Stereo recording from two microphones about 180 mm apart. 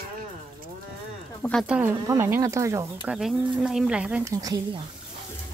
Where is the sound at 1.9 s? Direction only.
20° right (ahead or behind).